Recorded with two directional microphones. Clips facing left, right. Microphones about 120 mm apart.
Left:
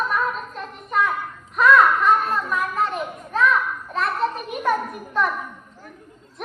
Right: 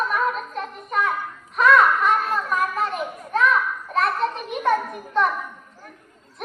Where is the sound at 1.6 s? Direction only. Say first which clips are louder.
Left 1 dB; centre (ahead or behind).